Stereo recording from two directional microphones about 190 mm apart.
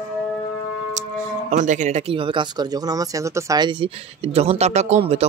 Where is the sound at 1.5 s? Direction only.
40° right (ahead or behind).